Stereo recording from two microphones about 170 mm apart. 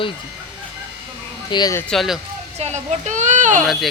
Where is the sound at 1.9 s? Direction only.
Centre (ahead or behind).